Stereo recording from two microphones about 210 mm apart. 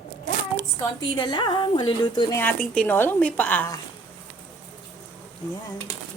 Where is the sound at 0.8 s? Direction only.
20° left (ahead or behind).